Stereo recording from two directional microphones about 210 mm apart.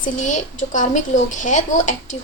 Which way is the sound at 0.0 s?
35° left (ahead or behind).